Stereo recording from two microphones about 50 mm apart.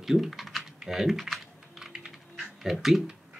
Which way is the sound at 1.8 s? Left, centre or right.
Centre.